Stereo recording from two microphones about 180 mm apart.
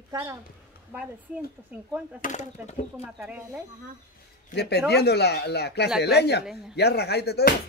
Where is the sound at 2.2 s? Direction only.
40° left (ahead or behind).